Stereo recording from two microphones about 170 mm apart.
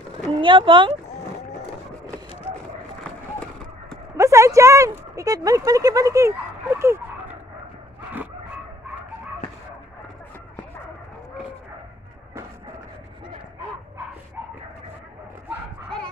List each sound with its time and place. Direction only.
0.3 s speech: 30° right (ahead or behind)
4.2 s speech: 15° right (ahead or behind)